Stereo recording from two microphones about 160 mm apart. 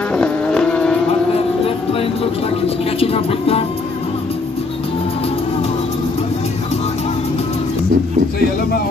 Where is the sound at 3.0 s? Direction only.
35° left (ahead or behind).